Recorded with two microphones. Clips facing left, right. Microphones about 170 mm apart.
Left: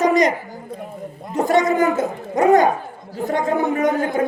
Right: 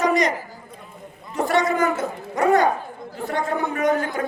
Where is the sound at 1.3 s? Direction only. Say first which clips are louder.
Left 4 dB; 20° left (ahead or behind).